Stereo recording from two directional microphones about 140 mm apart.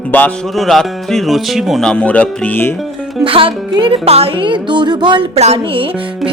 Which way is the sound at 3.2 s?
40° right (ahead or behind).